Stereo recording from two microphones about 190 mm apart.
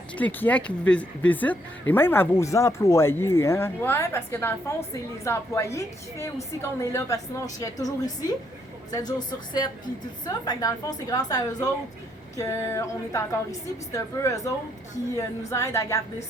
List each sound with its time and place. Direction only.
0.2 s a woman's voice: 10° left (ahead or behind)